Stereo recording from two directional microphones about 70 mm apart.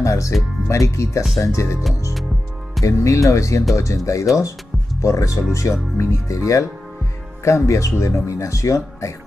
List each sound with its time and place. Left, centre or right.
0.0 s speech: left
2.8 s speech: left